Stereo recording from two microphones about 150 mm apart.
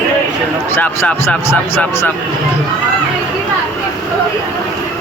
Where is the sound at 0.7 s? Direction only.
15° left (ahead or behind).